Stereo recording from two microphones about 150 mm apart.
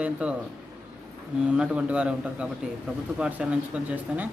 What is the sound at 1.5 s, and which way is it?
Speech, 5° right (ahead or behind).